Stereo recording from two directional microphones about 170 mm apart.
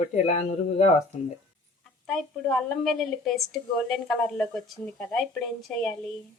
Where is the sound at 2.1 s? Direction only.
Centre (ahead or behind).